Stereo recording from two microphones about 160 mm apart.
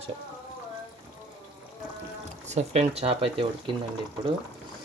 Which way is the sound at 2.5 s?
45° right (ahead or behind).